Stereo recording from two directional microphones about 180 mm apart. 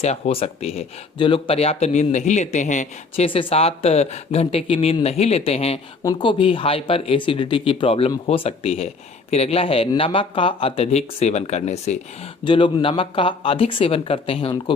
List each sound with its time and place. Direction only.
0.0 s speech: 35° left (ahead or behind)
6.0 s speech: 20° left (ahead or behind); by 11.9 s 40° left (ahead or behind)
12.5 s speech: 30° left (ahead or behind)